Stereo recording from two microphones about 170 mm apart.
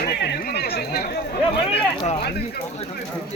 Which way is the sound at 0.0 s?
70° left (ahead or behind).